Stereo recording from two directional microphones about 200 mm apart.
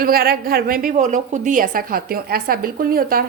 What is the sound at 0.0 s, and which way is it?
A woman's voice, 50° right (ahead or behind).